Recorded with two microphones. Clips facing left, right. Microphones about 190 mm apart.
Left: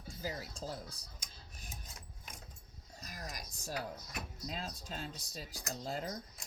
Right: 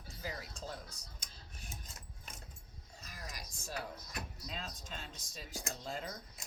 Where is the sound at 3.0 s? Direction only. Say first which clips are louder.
Left 3 dB; 40° left (ahead or behind).